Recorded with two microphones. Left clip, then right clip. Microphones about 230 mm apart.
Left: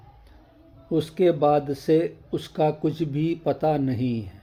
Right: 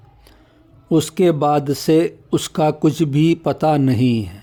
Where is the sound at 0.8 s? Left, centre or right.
Right.